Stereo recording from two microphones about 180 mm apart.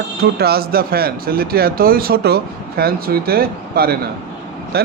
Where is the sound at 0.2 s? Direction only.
60° right (ahead or behind).